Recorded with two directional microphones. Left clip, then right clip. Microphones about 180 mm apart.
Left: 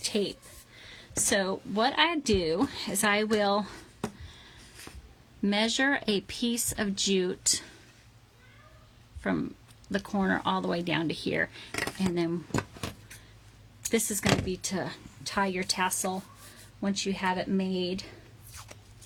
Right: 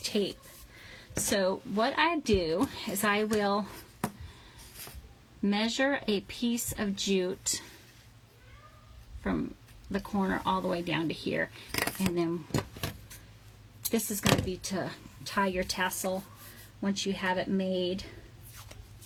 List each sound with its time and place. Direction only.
0.0 s a woman's voice: 55° left (ahead or behind)
5.4 s a woman's voice: 50° left (ahead or behind)
9.9 s a woman's voice: 50° left (ahead or behind)
13.9 s a woman's voice: 55° left (ahead or behind)